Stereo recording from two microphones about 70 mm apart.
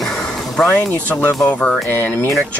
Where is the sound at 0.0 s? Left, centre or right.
Centre.